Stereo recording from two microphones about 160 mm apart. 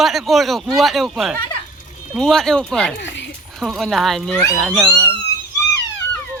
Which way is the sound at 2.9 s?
90° left.